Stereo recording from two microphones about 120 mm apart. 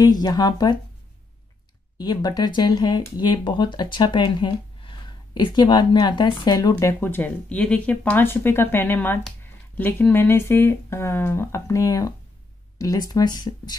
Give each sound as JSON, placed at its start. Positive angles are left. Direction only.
{"t": 0.0, "sound": "speech", "side_deg": 35}
{"t": 2.0, "sound": "speech", "side_deg": 35}